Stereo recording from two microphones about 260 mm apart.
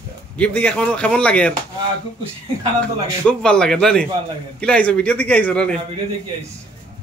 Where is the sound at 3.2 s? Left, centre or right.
Centre.